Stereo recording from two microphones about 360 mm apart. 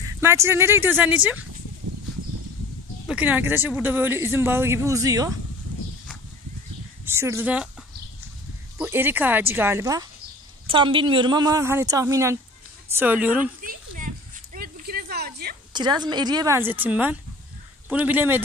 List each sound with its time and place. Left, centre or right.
0.2 s speech: centre
3.1 s speech: centre
7.1 s speech: centre
8.7 s speech: centre
13.6 s a sound: right
15.7 s speech: centre